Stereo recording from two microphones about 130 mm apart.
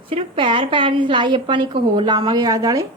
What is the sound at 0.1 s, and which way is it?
A woman's voice, 40° right (ahead or behind).